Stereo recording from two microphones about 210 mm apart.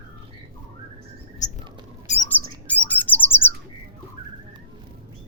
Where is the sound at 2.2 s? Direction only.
10° left (ahead or behind).